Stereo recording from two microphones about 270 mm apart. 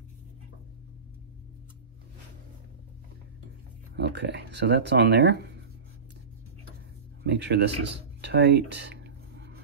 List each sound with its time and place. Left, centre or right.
3.9 s speech: right
7.2 s speech: right
8.2 s a sound: right